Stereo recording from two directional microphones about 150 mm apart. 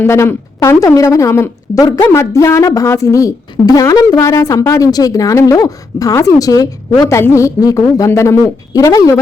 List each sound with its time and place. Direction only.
0.0 s a woman's voice: 15° left (ahead or behind)